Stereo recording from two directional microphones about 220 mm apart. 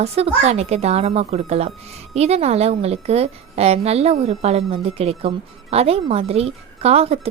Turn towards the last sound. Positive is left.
turn(degrees=-30)  # may be behind; listen again after turning